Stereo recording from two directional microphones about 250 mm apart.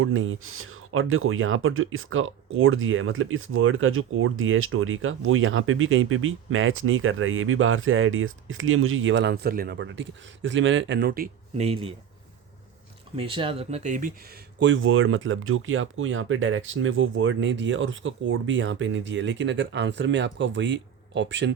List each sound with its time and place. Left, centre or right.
0.0 s speech: right
13.1 s speech: right